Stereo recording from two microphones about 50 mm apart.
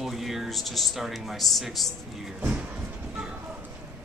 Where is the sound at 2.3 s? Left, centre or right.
Right.